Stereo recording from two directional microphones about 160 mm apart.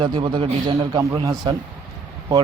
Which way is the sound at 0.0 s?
30° right (ahead or behind).